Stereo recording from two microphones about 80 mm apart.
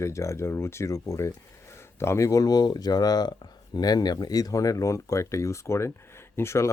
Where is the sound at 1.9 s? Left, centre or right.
Left.